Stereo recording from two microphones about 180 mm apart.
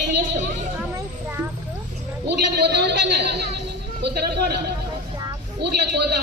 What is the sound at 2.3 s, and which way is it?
A man's voice, 70° right (ahead or behind).